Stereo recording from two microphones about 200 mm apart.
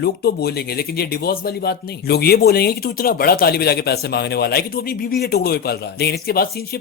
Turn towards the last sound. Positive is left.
turn(degrees=50)  # may be behind; listen again after turning